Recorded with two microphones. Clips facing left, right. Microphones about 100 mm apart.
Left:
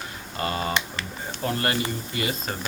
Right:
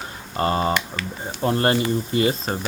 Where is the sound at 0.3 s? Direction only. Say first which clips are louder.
Right 6 dB; 30° right (ahead or behind).